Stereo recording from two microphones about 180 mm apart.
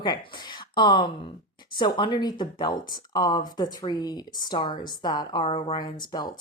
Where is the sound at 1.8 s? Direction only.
25° left (ahead or behind).